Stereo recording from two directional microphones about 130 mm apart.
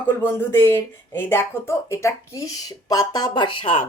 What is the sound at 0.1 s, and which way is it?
A woman's voice, 15° left (ahead or behind).